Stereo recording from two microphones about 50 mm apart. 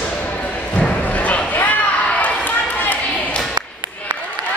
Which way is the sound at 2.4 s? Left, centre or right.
Left.